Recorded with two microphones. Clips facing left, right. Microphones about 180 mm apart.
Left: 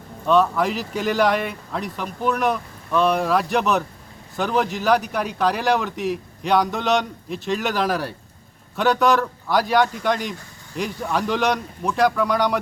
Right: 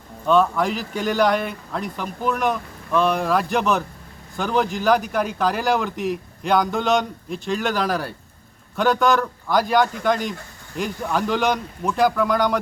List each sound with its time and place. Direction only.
0.3 s a man's voice: centre (ahead or behind)